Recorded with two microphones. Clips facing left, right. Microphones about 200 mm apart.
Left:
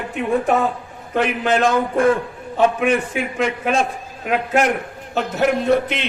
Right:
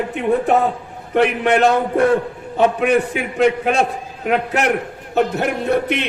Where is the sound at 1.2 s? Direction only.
65° right (ahead or behind).